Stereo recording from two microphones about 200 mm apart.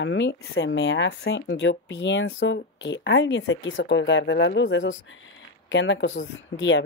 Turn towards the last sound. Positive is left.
turn(degrees=70)  # may be behind; listen again after turning